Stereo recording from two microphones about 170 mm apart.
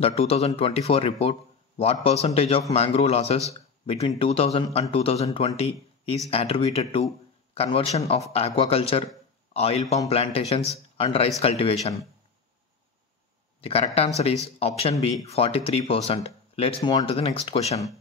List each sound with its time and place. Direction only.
0.0 s speech: 35° left (ahead or behind)
13.6 s speech: 35° left (ahead or behind)